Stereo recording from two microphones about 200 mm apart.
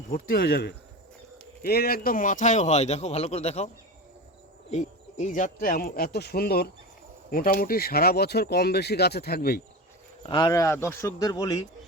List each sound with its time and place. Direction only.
0.1 s a man's voice: 50° left (ahead or behind); by 3.7 s 35° left (ahead or behind)
4.7 s speech: 35° left (ahead or behind)
10.2 s speech: 20° left (ahead or behind)